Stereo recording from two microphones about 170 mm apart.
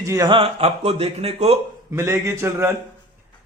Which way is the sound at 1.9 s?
15° right (ahead or behind).